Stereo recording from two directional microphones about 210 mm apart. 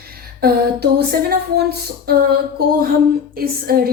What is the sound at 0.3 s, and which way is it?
A woman's voice, 50° right (ahead or behind).